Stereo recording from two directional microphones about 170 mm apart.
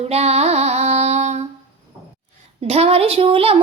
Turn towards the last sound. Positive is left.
turn(degrees=-35)  # may be behind; listen again after turning